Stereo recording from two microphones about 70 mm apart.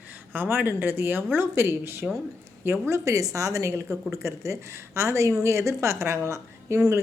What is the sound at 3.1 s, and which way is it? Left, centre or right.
A woman's voice, right.